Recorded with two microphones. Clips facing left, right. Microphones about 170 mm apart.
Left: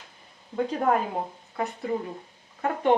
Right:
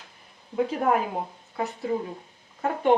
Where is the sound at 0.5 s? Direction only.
5° right (ahead or behind).